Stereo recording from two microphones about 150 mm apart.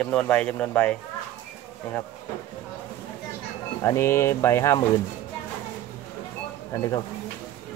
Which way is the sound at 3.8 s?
15° left (ahead or behind).